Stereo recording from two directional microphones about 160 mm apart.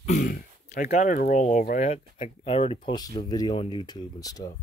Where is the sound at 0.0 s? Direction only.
50° left (ahead or behind).